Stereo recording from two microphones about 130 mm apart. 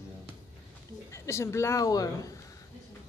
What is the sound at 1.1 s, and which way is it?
A woman's voice, 20° left (ahead or behind).